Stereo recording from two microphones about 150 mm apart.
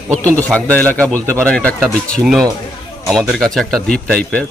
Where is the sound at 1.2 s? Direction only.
15° right (ahead or behind).